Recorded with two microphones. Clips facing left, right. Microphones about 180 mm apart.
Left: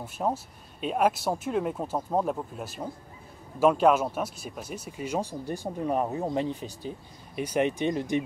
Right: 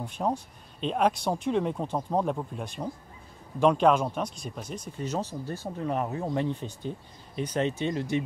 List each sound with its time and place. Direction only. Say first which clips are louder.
0.0 s speech: even; 5° left (ahead or behind)